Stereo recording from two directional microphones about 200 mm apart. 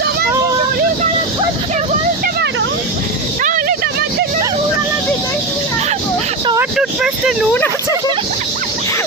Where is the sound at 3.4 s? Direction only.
40° right (ahead or behind).